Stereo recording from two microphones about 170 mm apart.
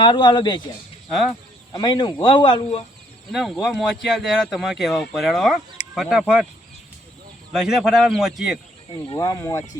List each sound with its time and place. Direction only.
0.0 s speech: 25° left (ahead or behind)
1.7 s speech: 25° left (ahead or behind)
3.3 s speech: centre (ahead or behind)
7.5 s speech: 5° right (ahead or behind)
8.9 s speech: 25° left (ahead or behind)